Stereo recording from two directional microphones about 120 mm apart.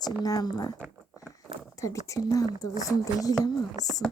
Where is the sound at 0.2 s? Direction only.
35° left (ahead or behind).